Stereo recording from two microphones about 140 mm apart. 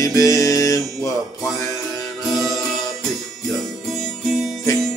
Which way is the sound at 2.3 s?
Centre (ahead or behind).